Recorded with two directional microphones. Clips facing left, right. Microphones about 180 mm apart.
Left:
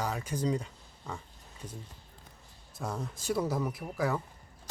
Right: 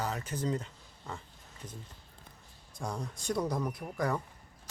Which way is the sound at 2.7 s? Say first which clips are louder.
Left 1 dB; 5° left (ahead or behind).